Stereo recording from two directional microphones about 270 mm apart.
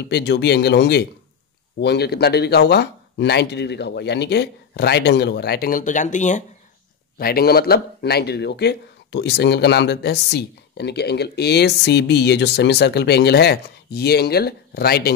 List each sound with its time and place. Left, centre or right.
0.1 s speech: left